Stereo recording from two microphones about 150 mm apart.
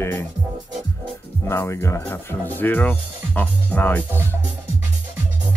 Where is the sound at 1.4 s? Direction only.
20° left (ahead or behind).